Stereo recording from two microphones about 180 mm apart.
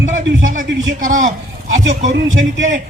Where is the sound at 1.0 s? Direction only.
45° right (ahead or behind).